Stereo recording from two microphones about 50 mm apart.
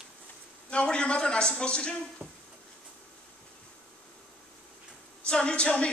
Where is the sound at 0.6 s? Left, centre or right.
Left.